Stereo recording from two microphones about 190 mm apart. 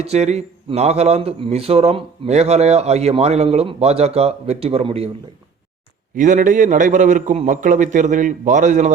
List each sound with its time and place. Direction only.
0.0 s speech: 35° right (ahead or behind)
6.1 s speech: 45° right (ahead or behind)